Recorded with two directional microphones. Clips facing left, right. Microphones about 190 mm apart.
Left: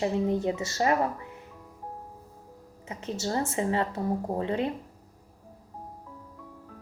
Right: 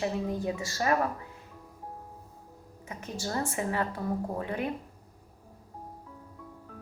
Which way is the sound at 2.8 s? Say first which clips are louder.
Left 4 dB; 25° left (ahead or behind).